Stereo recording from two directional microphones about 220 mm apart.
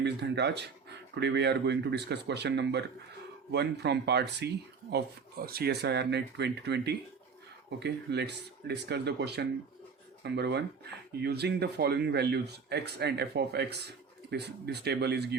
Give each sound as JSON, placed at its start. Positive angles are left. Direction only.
{"t": 0.0, "sound": "speech", "side_deg": -50}
{"t": 5.5, "sound": "speech", "side_deg": -45}